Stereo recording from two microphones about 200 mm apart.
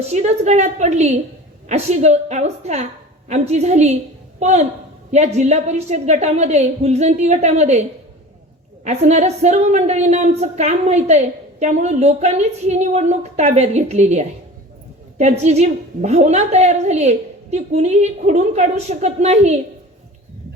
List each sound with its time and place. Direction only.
0.0 s a woman's voice: 35° right (ahead or behind)